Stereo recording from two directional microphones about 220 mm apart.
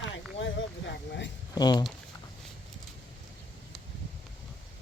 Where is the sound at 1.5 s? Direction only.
20° left (ahead or behind).